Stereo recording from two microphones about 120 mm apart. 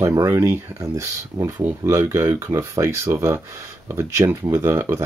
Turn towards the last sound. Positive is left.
turn(degrees=-20)  # may be behind; listen again after turning